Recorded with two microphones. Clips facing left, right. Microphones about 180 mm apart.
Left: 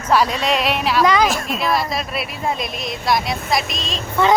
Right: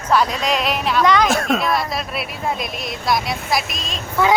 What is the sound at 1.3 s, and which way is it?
Speech, 70° right (ahead or behind).